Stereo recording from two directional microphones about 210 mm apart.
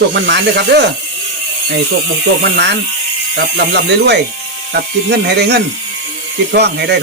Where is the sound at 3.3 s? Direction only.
55° right (ahead or behind).